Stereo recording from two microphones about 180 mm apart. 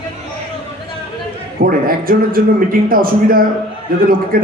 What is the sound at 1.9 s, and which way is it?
A man's voice, 55° right (ahead or behind).